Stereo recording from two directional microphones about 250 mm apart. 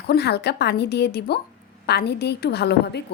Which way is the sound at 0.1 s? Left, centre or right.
Left.